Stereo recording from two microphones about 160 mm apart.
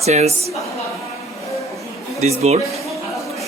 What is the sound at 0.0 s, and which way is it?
Speech, 40° right (ahead or behind).